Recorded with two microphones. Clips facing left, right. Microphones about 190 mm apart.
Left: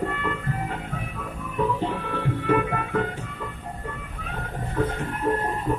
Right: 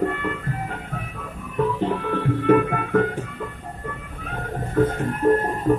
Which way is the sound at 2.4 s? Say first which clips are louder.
Right 6 dB; 50° right (ahead or behind).